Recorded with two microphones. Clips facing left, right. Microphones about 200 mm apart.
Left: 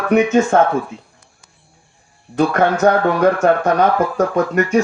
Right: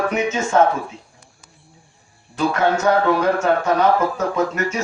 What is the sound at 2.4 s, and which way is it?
Speech, 55° left (ahead or behind).